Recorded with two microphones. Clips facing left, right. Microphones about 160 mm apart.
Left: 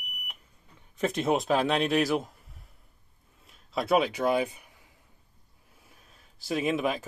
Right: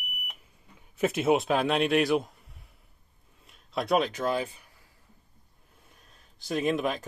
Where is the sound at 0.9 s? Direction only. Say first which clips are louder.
Right 2 dB; 5° right (ahead or behind).